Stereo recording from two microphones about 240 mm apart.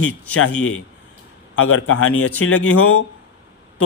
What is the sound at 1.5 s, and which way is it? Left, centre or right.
A man's voice, left.